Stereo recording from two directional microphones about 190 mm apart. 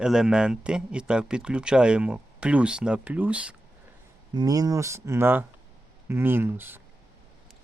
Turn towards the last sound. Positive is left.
turn(degrees=-10)  # may be behind; listen again after turning